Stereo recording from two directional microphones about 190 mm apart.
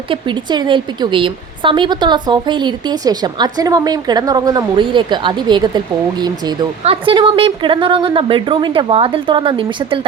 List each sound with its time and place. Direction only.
0.1 s a woman's voice: 25° right (ahead or behind)